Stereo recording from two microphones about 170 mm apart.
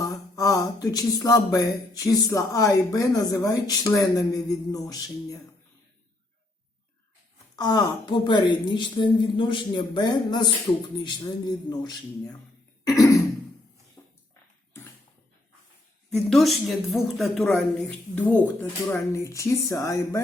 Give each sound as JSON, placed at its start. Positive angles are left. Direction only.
{"t": 0.0, "sound": "speech", "side_deg": 20}
{"t": 7.5, "sound": "speech", "side_deg": 25}
{"t": 12.8, "sound": "throat clearing", "side_deg": 20}
{"t": 14.0, "sound": "music", "side_deg": 15}
{"t": 16.0, "sound": "a woman's voice", "side_deg": 0}